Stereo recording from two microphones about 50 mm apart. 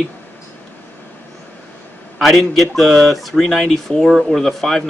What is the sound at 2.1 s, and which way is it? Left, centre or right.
Speech, centre.